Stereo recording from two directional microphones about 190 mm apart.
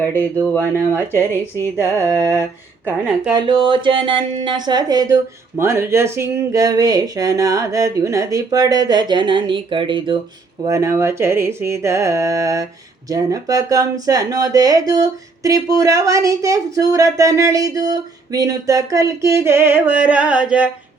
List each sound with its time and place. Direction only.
0.4 s speech: 10° left (ahead or behind)
3.2 s speech: 20° right (ahead or behind); by 20.7 s 5° right (ahead or behind)